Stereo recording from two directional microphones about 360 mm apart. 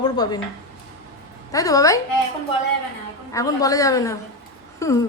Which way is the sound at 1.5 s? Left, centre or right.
Centre.